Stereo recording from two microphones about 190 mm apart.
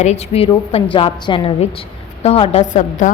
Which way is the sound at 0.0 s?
35° left (ahead or behind).